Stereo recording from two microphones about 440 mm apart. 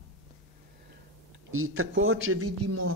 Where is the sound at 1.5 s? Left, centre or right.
Right.